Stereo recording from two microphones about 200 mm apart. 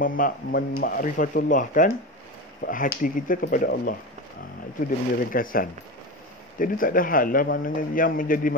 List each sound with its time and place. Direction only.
0.0 s a man's voice: 45° left (ahead or behind)
5.3 s a man's voice: 45° left (ahead or behind)